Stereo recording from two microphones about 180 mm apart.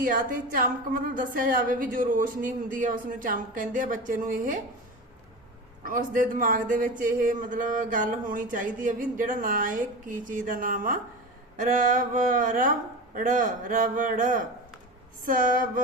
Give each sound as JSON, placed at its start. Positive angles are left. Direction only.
{"t": 0.0, "sound": "a man's voice", "side_deg": -50}
{"t": 5.8, "sound": "a man's voice", "side_deg": -50}